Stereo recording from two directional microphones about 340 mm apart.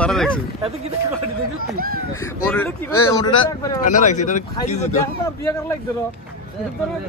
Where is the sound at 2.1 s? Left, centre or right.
Centre.